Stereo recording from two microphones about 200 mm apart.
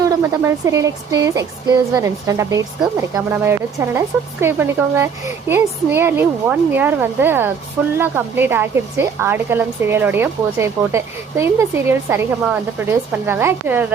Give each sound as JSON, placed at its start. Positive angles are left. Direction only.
{"t": 0.0, "sound": "a woman's voice", "side_deg": -15}